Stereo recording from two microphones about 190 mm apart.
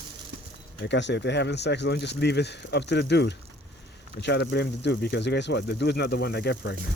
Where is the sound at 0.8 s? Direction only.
65° left (ahead or behind).